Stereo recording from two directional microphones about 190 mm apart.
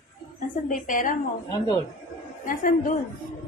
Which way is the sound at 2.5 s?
45° left (ahead or behind).